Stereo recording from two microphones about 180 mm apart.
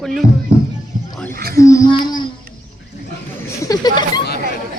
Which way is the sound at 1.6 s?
20° left (ahead or behind).